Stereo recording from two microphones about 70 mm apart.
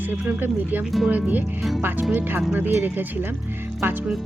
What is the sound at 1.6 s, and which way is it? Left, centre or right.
Speech, centre.